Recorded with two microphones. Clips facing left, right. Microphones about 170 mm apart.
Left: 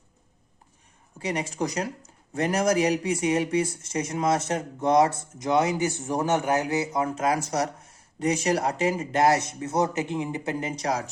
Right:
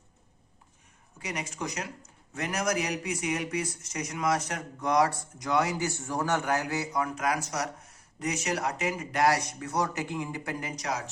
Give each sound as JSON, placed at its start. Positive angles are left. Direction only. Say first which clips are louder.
{"t": 1.2, "sound": "speech", "louder": "left 7 dB", "side_deg": 30}